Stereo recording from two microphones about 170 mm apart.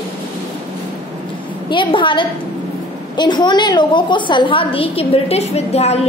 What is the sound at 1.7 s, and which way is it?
A woman's voice, 30° left (ahead or behind).